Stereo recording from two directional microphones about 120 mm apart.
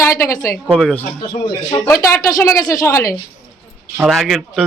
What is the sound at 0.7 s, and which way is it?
Speech, 5° left (ahead or behind).